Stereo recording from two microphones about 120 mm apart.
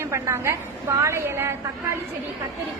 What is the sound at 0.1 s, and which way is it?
A woman's voice, 25° right (ahead or behind).